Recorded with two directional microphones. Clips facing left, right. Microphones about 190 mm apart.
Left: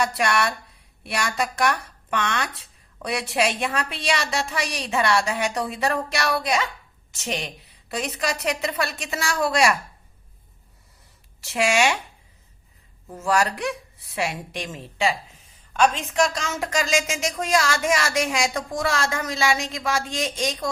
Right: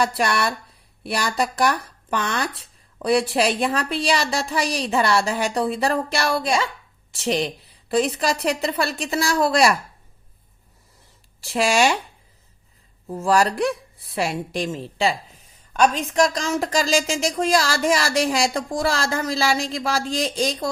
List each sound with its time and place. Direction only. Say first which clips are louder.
0.0 s speech: right 1 dB; 30° right (ahead or behind)
11.4 s speech: right 2 dB; 35° right (ahead or behind)
13.1 s speech: right 4 dB; 35° right (ahead or behind)